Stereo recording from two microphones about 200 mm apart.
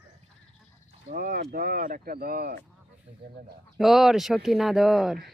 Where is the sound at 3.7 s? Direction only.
Centre (ahead or behind).